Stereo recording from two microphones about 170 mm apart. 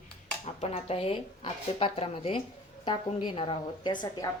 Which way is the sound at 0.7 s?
35° left (ahead or behind).